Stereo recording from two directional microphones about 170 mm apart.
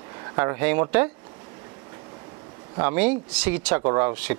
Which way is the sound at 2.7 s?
10° right (ahead or behind).